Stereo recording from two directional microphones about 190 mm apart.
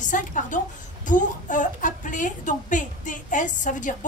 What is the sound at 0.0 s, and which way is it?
A woman's voice, 40° left (ahead or behind).